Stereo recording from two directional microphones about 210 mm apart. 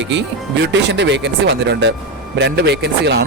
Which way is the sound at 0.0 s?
60° right (ahead or behind).